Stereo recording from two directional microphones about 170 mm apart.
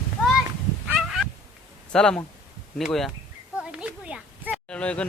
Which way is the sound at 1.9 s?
5° left (ahead or behind).